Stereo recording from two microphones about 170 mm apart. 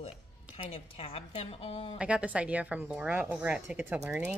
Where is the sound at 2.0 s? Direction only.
5° right (ahead or behind).